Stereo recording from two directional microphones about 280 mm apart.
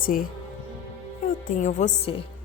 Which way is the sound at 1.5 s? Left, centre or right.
Left.